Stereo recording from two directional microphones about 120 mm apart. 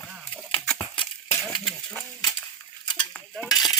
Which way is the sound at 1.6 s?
5° left (ahead or behind).